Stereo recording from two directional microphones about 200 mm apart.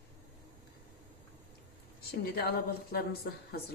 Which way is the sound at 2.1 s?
50° left (ahead or behind).